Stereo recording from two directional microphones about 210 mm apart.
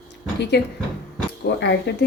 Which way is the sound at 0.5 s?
50° left (ahead or behind).